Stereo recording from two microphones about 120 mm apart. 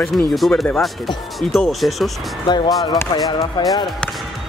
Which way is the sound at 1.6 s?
Centre (ahead or behind).